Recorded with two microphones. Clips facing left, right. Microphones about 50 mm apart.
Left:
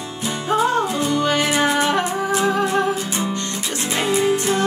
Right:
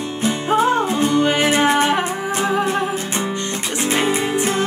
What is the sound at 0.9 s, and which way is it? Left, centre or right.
Music, right.